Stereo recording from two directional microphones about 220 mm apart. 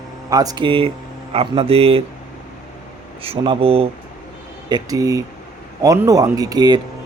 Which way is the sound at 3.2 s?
25° right (ahead or behind).